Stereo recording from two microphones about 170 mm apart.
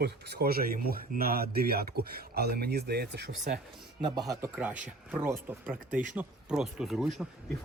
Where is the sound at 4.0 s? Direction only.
20° right (ahead or behind).